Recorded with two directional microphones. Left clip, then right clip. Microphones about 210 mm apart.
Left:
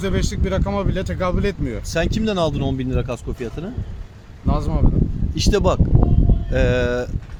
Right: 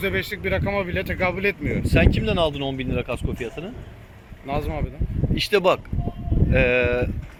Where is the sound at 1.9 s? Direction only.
25° left (ahead or behind).